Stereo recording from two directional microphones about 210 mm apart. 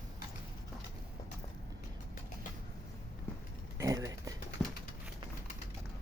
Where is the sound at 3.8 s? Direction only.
15° right (ahead or behind).